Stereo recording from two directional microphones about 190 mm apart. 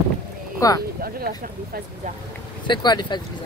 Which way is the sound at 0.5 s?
20° left (ahead or behind).